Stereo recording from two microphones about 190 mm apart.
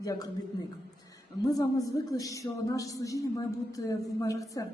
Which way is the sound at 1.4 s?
20° left (ahead or behind).